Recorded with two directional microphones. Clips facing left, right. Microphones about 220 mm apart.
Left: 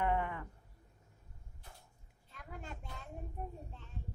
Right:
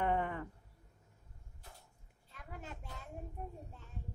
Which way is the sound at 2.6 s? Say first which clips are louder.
Even; 5° right (ahead or behind).